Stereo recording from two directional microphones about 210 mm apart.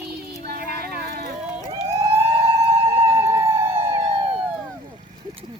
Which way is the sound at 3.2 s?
15° right (ahead or behind).